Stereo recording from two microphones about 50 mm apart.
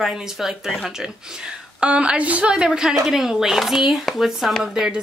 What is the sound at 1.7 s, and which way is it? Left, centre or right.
Speech, right.